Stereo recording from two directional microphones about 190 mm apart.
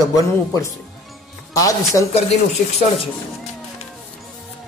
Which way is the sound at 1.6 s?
15° left (ahead or behind).